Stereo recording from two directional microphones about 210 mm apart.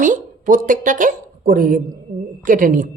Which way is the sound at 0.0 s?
40° right (ahead or behind).